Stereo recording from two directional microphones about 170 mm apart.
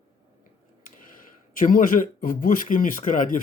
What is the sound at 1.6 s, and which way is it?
A man's voice, 55° left (ahead or behind).